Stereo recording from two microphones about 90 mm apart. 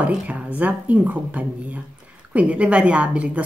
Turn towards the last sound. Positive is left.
turn(degrees=-15)  # may be behind; listen again after turning